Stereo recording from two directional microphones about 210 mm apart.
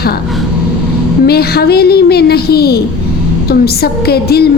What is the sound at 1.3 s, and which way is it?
A woman's voice, 50° left (ahead or behind).